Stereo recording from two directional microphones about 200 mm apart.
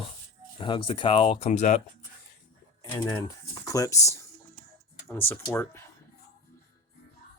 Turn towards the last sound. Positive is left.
turn(degrees=10)  # may be behind; listen again after turning